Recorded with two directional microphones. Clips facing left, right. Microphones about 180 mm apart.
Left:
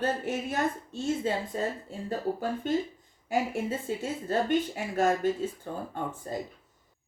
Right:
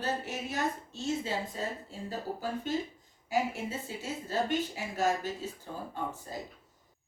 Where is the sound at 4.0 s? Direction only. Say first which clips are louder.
Left 1 dB; 55° left (ahead or behind).